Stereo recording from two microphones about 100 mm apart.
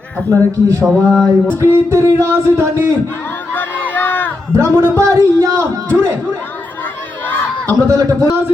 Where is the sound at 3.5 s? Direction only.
20° left (ahead or behind).